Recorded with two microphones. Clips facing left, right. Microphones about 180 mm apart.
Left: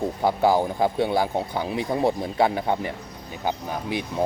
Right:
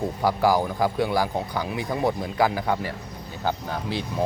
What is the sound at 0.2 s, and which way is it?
Speech, 25° left (ahead or behind).